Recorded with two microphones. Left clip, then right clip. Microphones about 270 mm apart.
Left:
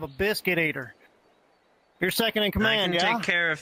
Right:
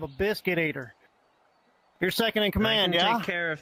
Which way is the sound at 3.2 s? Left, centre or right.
Left.